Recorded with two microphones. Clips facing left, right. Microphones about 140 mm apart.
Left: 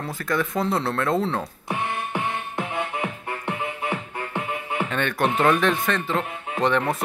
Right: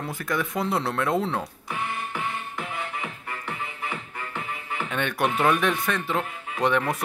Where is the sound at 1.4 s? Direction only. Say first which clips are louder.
Left 3 dB; 25° left (ahead or behind).